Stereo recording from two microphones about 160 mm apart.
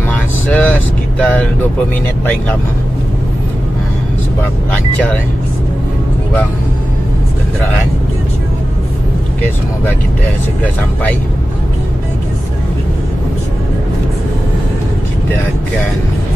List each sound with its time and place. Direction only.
0.5 s vehicle: 10° left (ahead or behind)